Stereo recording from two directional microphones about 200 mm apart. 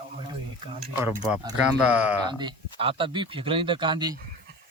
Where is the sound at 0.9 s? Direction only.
10° right (ahead or behind).